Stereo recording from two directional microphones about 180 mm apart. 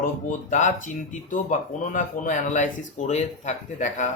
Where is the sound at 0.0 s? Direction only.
45° left (ahead or behind).